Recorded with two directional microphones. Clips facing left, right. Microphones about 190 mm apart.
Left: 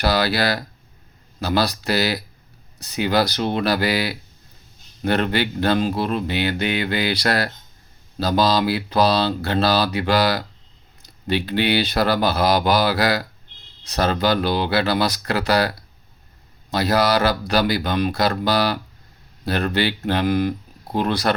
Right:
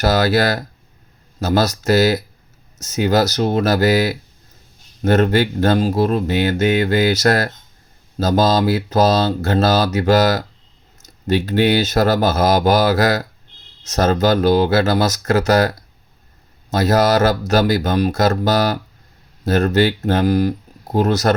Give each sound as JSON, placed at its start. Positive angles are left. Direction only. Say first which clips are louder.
{"t": 0.0, "sound": "speech", "louder": "right 4 dB", "side_deg": -45}